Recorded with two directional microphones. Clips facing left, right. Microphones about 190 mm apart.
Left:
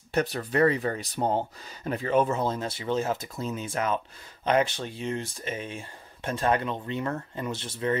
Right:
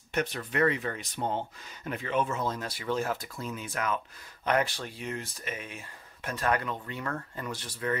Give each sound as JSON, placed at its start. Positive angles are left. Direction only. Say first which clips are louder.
{"t": 0.1, "sound": "speech", "louder": "left 5 dB", "side_deg": 35}